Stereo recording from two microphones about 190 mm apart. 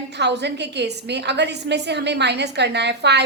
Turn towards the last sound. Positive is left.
turn(degrees=-65)  # may be behind; listen again after turning